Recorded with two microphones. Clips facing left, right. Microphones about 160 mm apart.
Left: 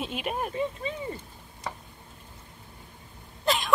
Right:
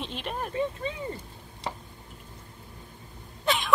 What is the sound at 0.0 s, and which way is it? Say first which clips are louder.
Speech: left 3 dB; 10° left (ahead or behind).